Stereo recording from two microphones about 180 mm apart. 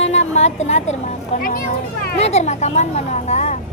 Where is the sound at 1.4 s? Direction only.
55° left (ahead or behind).